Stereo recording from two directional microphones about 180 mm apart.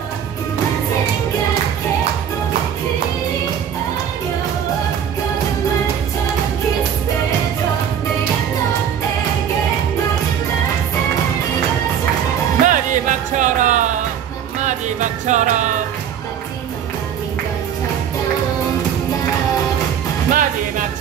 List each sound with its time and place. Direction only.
12.6 s music: 45° right (ahead or behind)
20.2 s music: 45° right (ahead or behind)